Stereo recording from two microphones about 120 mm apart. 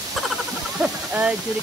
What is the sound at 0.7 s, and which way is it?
Speech, 10° right (ahead or behind).